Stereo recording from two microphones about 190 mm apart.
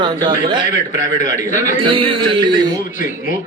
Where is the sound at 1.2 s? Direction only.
40° left (ahead or behind).